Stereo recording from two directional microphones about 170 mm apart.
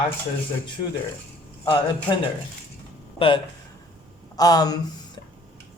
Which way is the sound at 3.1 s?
30° left (ahead or behind).